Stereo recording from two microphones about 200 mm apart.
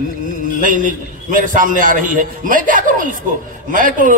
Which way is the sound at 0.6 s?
40° right (ahead or behind).